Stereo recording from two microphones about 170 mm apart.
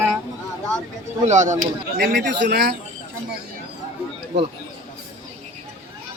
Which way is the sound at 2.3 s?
80° right.